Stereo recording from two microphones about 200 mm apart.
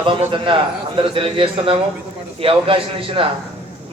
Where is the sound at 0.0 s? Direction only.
25° right (ahead or behind).